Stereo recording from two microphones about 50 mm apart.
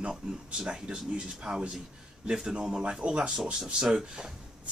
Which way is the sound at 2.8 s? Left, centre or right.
Right.